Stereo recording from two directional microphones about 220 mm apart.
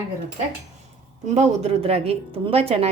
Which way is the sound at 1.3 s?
30° right (ahead or behind).